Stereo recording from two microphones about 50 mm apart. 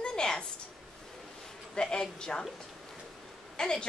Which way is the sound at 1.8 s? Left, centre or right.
Centre.